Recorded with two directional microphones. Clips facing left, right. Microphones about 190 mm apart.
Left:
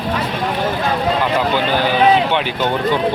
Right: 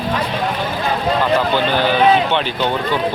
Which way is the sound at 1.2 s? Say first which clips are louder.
Right 1 dB; 10° left (ahead or behind).